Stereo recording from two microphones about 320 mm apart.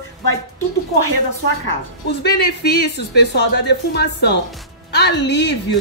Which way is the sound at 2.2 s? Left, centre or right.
Left.